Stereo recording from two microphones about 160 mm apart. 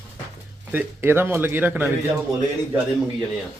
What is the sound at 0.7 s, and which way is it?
Speech, 10° right (ahead or behind).